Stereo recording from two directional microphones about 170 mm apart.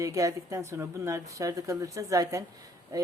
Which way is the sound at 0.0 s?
20° right (ahead or behind).